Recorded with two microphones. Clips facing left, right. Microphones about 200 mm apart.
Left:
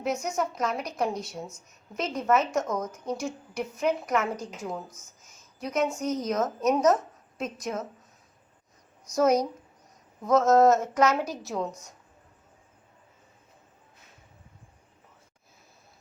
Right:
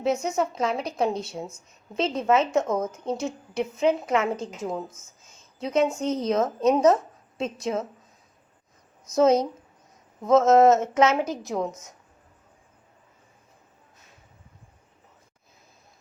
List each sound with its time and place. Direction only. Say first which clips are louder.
0.0 s a woman's voice: right 4 dB; 25° right (ahead or behind)
9.1 s a woman's voice: right 3 dB; 25° right (ahead or behind)